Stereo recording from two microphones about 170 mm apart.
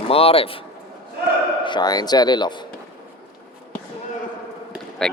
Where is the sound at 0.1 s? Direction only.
35° left (ahead or behind).